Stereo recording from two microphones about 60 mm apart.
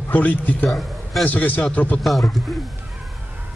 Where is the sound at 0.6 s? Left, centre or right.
Centre.